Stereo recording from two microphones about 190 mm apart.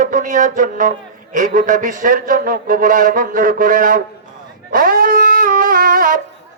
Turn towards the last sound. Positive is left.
turn(degrees=-45)  # may be behind; listen again after turning